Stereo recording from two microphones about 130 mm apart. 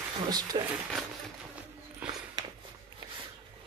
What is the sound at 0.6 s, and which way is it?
Speech, 30° right (ahead or behind).